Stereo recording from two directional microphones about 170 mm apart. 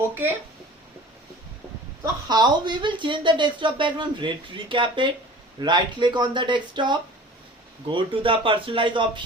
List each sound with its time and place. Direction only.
2.2 s speech: 25° right (ahead or behind)